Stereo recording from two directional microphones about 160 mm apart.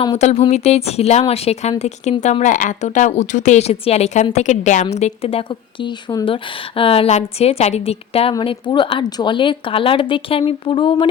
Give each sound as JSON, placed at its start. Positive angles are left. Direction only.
{"t": 0.0, "sound": "a woman's voice", "side_deg": 40}